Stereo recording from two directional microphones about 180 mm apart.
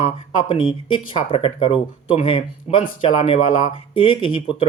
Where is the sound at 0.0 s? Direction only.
30° left (ahead or behind).